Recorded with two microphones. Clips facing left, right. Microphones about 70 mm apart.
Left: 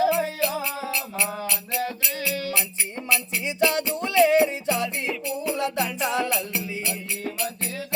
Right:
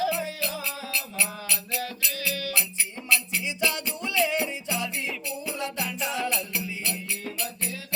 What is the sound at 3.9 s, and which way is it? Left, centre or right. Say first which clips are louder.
Music: left 5 dB; left.